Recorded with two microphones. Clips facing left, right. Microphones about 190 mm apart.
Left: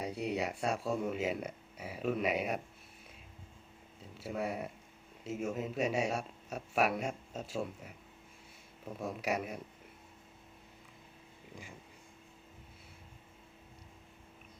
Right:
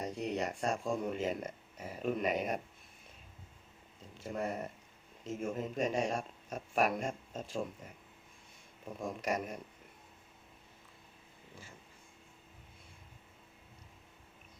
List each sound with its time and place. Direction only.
0.0 s speech: 5° left (ahead or behind)
4.0 s speech: 5° left (ahead or behind)